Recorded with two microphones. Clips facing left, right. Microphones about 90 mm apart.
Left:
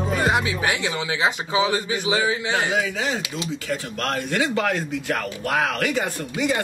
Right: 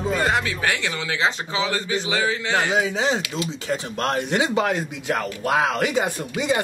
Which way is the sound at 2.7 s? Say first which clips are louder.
Right 2 dB; 20° right (ahead or behind).